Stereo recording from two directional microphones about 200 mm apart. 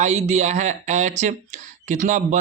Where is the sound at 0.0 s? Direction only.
35° right (ahead or behind).